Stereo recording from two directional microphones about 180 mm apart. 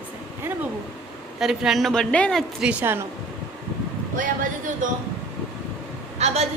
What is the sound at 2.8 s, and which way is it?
Speech, 10° right (ahead or behind).